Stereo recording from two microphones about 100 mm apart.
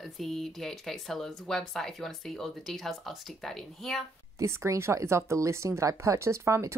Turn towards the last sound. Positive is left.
turn(degrees=-30)  # may be behind; listen again after turning